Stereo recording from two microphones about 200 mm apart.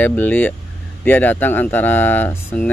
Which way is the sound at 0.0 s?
10° left (ahead or behind).